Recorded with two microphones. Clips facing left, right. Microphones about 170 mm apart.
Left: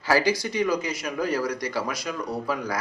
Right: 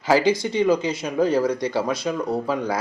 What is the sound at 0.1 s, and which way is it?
Speech, 20° right (ahead or behind).